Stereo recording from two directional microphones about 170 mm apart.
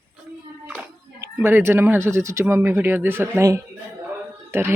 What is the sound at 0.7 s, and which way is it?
A woman's voice, 10° right (ahead or behind).